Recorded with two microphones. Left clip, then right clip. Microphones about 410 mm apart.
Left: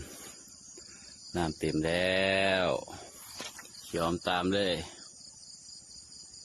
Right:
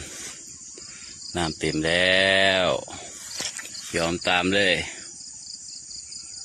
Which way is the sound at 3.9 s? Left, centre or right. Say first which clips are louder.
Right 7 dB; left.